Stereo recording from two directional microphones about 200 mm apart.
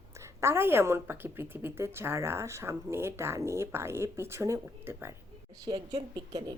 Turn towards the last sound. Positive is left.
turn(degrees=-20)  # may be behind; listen again after turning